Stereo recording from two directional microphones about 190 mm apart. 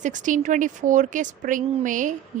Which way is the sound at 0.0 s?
40° right (ahead or behind).